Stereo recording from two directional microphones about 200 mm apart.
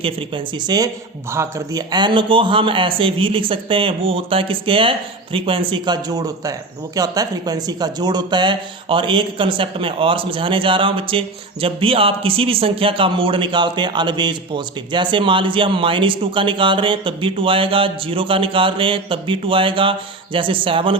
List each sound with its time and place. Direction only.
0.0 s speech: 25° right (ahead or behind)